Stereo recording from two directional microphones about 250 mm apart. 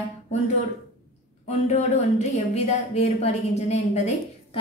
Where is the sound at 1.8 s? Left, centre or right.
Left.